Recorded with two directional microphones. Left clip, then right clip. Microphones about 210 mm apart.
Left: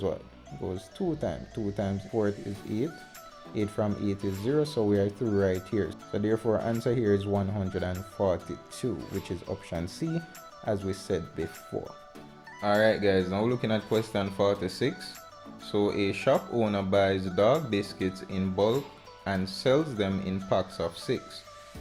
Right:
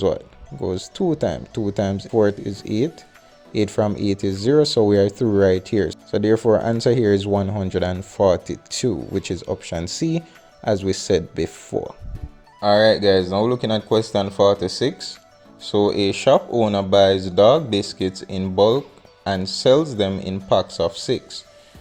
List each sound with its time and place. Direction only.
0.6 s speech: 45° right (ahead or behind)
12.6 s speech: 30° right (ahead or behind)